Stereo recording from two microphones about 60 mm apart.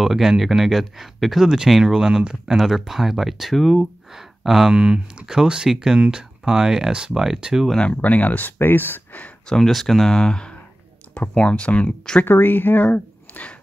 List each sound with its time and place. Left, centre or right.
0.0 s speech: centre
4.7 s speech: centre
7.7 s speech: centre
9.5 s speech: centre; by 12.3 s left
12.3 s speech: left